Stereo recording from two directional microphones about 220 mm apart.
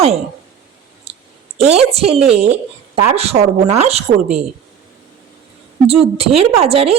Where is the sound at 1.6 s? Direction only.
30° right (ahead or behind).